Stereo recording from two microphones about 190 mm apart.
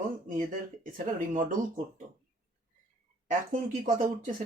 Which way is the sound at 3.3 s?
45° right (ahead or behind).